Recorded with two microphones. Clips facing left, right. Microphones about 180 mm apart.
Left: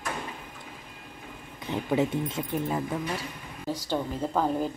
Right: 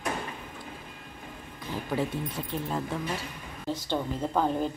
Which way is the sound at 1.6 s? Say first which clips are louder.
Left 4 dB; 20° left (ahead or behind).